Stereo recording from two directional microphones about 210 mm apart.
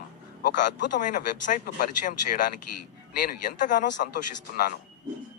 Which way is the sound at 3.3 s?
40° left (ahead or behind).